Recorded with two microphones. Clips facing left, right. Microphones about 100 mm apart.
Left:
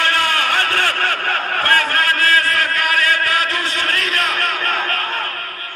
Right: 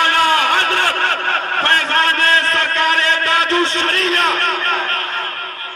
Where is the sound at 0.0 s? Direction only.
20° right (ahead or behind).